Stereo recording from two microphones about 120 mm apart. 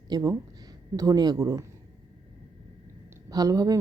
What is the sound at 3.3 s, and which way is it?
Speech, 30° right (ahead or behind).